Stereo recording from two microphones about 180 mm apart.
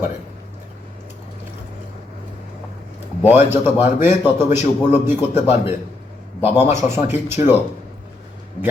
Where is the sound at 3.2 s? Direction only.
10° right (ahead or behind).